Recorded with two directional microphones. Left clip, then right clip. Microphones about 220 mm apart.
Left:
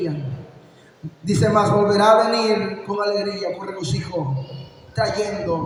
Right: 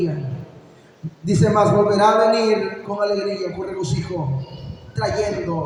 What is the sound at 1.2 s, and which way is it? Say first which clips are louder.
A man's voice: right 1 dB; 40° left (ahead or behind).